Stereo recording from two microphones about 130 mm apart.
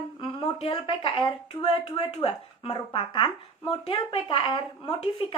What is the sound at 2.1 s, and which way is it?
Speech, 45° left (ahead or behind).